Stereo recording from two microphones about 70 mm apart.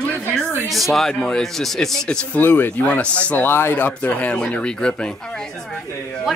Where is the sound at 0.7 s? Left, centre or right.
Centre.